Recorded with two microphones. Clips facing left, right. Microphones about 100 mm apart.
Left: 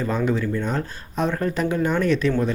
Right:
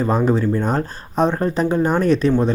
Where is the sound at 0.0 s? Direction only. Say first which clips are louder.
Right 5 dB; 35° right (ahead or behind).